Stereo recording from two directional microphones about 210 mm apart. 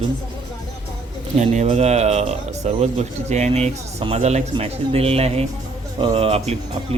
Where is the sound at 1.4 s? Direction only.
30° right (ahead or behind).